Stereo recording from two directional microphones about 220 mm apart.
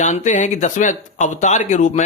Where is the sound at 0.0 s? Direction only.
35° left (ahead or behind).